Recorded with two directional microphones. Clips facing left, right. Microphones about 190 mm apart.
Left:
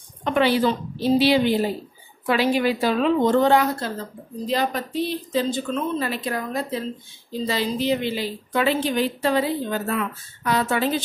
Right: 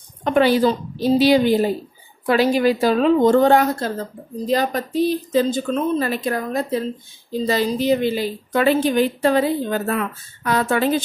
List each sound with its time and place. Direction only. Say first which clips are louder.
0.2 s a woman's voice: right 4 dB; 45° right (ahead or behind)